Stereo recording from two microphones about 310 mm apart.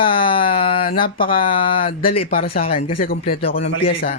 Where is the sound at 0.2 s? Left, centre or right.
Centre.